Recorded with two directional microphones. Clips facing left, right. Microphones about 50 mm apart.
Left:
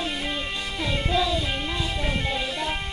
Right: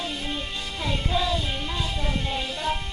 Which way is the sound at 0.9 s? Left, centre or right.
Left.